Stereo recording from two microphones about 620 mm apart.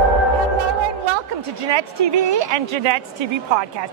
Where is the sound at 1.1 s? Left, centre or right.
Right.